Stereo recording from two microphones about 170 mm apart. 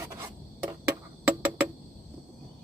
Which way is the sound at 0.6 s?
10° right (ahead or behind).